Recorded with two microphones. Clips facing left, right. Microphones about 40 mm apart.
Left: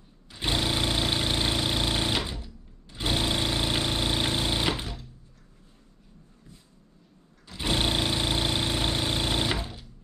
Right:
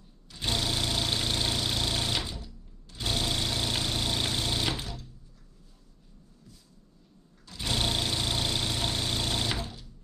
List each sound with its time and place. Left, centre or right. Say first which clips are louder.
0.3 s engine: left 3 dB; centre
7.4 s engine: left 3 dB; left